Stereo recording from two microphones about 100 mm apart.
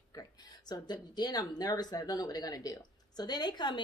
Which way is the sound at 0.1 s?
40° left (ahead or behind).